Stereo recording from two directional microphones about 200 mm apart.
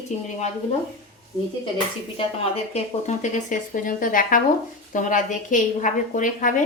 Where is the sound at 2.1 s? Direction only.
30° left (ahead or behind).